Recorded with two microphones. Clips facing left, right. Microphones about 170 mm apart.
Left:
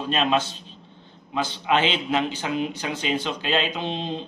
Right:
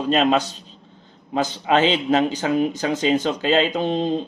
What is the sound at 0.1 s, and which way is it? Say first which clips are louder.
Speech: right 4 dB; 40° right (ahead or behind).